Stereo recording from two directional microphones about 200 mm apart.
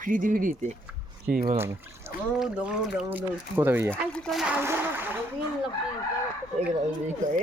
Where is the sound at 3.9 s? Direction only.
5° left (ahead or behind).